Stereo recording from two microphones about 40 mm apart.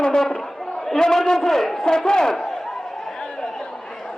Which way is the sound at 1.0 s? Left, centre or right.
Centre.